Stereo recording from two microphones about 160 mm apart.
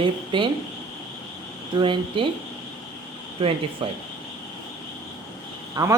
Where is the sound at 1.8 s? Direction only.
30° right (ahead or behind).